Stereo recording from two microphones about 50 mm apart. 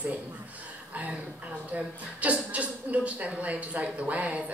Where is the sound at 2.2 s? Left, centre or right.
Right.